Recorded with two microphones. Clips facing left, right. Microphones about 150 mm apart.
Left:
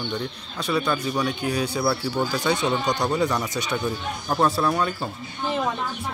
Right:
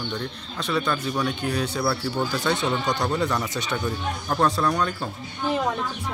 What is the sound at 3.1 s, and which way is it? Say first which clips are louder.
A man's voice: left 1 dB; 5° left (ahead or behind).